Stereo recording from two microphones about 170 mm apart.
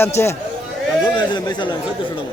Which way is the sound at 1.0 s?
25° left (ahead or behind).